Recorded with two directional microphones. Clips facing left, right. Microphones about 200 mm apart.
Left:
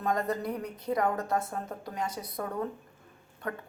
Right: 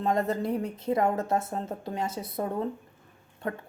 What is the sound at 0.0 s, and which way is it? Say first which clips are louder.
Speech: right 3 dB; 25° right (ahead or behind).